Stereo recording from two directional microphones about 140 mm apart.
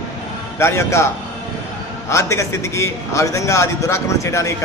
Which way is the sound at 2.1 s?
20° left (ahead or behind).